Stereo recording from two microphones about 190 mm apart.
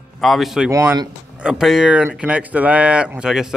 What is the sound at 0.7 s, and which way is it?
Speech, 15° right (ahead or behind).